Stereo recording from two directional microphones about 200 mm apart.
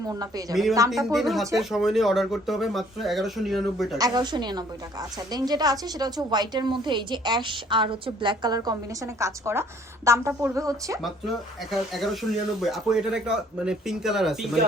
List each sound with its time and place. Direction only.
0.1 s a woman's voice: 20° right (ahead or behind)
0.9 s speech: centre (ahead or behind)
3.9 s a woman's voice: 20° right (ahead or behind)
11.0 s speech: centre (ahead or behind)